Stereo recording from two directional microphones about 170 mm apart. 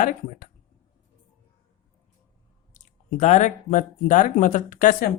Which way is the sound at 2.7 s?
45° left (ahead or behind).